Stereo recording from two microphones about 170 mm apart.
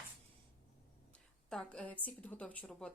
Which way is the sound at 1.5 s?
5° left (ahead or behind).